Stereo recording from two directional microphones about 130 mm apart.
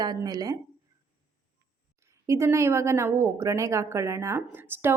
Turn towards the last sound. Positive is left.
turn(degrees=-15)  # may be behind; listen again after turning